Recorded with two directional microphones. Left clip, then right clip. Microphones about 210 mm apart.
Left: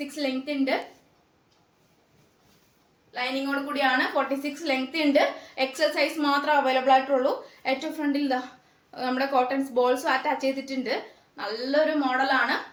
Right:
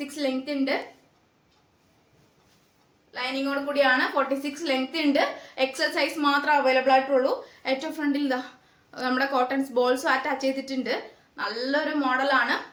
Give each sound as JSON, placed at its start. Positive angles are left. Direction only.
{"t": 0.1, "sound": "a woman's voice", "side_deg": -15}
{"t": 3.7, "sound": "a woman's voice", "side_deg": -15}